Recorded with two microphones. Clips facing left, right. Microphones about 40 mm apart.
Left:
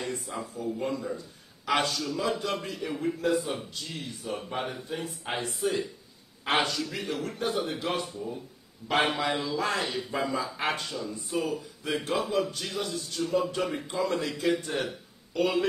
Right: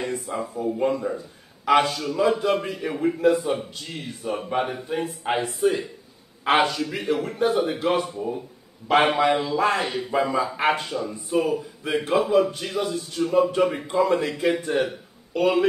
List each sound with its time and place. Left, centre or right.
0.3 s speech: right
3.2 s speech: centre
8.2 s a man's voice: right
9.3 s speech: right
9.8 s speech: centre